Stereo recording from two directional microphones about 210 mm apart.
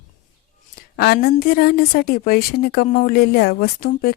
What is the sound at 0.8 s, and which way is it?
A woman's voice, 50° left (ahead or behind).